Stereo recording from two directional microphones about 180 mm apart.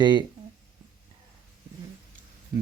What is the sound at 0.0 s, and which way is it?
Speech, 25° right (ahead or behind).